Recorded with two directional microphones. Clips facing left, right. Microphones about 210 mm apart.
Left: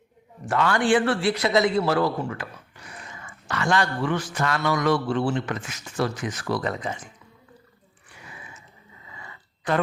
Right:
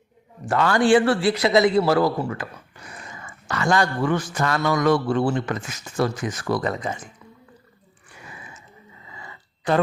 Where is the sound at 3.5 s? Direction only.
40° right (ahead or behind).